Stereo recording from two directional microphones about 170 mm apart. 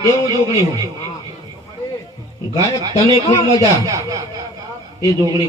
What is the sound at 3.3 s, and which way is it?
Speech, 25° left (ahead or behind).